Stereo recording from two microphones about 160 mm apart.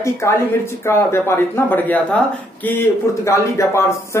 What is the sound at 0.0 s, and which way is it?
Speech, 15° left (ahead or behind).